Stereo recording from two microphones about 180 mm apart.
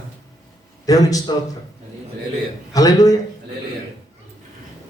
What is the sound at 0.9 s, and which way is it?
Speech, 20° left (ahead or behind).